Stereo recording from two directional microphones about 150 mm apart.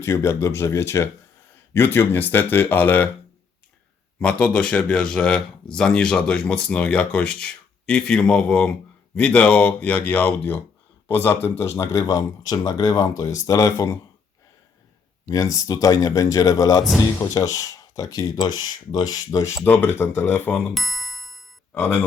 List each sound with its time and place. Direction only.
0.0 s speech: 20° left (ahead or behind)
4.2 s speech: 5° left (ahead or behind)
15.3 s speech: 20° left (ahead or behind)
20.7 s ding-dong: centre (ahead or behind)
21.8 s speech: 15° left (ahead or behind)